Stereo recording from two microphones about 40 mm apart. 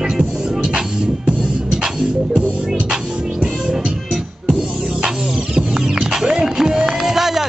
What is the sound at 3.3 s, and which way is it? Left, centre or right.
Music, centre.